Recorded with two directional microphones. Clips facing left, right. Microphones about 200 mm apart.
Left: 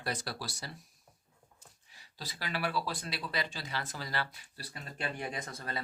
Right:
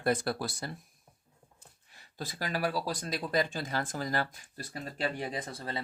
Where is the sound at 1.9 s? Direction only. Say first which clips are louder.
Right 6 dB; 50° right (ahead or behind).